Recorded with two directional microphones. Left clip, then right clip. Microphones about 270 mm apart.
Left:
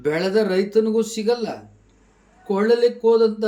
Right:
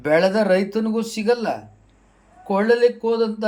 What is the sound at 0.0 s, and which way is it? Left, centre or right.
Speech, centre.